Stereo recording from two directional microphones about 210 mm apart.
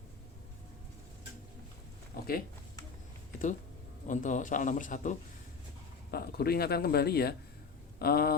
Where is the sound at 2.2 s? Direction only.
50° left (ahead or behind).